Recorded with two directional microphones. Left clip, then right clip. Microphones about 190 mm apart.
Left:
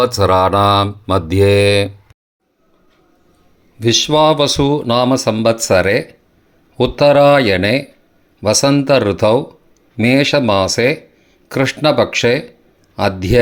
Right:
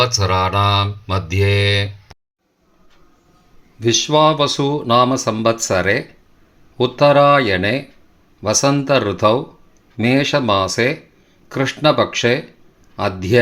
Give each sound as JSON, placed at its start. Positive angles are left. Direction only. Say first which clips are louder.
{"t": 0.0, "sound": "mantra", "louder": "left 5 dB", "side_deg": 50}
{"t": 3.8, "sound": "speech", "louder": "left 2 dB", "side_deg": 20}